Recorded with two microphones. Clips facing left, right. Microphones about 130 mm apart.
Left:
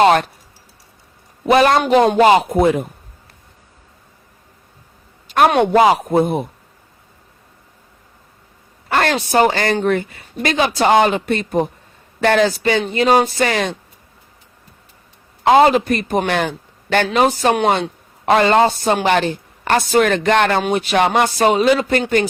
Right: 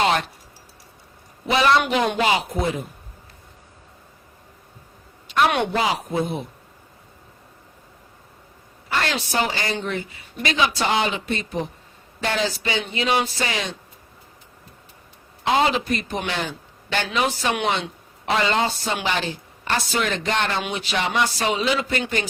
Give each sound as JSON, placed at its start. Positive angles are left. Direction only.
{"t": 0.0, "sound": "a sound", "side_deg": 50}
{"t": 1.5, "sound": "a woman's voice", "side_deg": 50}
{"t": 5.3, "sound": "speech", "side_deg": 45}
{"t": 5.7, "sound": "speech", "side_deg": 55}
{"t": 8.9, "sound": "a woman's voice", "side_deg": 55}
{"t": 15.4, "sound": "a woman's voice", "side_deg": 50}